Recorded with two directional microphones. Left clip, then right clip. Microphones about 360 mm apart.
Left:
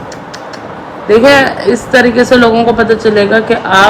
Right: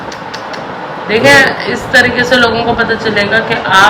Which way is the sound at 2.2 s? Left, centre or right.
Centre.